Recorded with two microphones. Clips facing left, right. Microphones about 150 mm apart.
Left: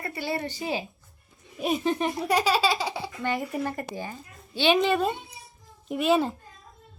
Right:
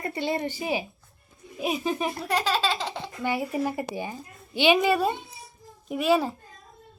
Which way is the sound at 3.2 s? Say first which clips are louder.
Right 3 dB; 10° right (ahead or behind).